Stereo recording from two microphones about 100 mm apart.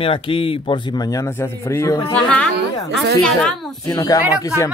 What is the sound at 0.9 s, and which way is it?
Speech, 35° left (ahead or behind).